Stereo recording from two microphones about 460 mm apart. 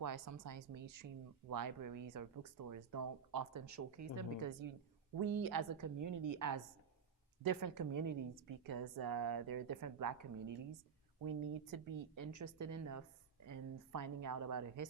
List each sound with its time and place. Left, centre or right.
0.0 s a woman's voice: right
5.1 s a woman's voice: right